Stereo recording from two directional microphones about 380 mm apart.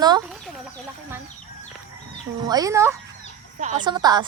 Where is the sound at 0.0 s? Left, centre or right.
Centre.